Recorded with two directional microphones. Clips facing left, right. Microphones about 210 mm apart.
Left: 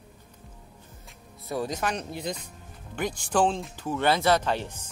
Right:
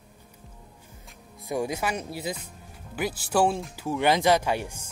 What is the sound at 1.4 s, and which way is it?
Speech, 15° right (ahead or behind).